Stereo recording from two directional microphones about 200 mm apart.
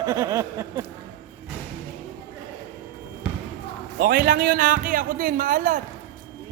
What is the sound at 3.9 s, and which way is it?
A man's voice, 50° right (ahead or behind).